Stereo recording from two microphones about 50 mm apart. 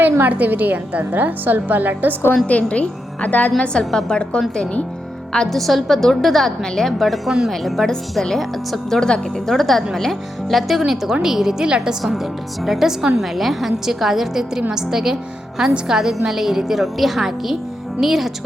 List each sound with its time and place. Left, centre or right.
0.0 s a woman's voice: right
2.5 s a woman's voice: left
3.6 s a woman's voice: centre
5.5 s a woman's voice: centre
9.0 s speech: centre
9.5 s a woman's voice: centre
12.0 s a woman's voice: centre